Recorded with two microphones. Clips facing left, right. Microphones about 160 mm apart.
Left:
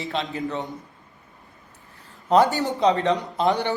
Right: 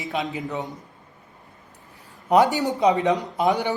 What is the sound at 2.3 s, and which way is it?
Speech, 15° right (ahead or behind).